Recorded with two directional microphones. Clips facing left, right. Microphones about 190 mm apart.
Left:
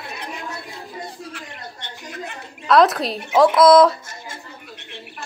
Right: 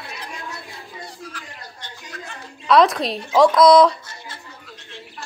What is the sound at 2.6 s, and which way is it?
A woman's voice, centre (ahead or behind).